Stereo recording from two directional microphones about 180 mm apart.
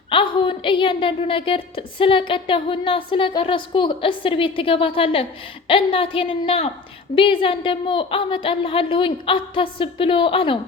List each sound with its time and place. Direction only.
0.1 s a woman's voice: 30° left (ahead or behind)